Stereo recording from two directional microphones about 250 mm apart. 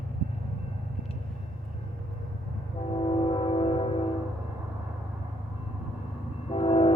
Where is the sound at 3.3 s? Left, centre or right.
Left.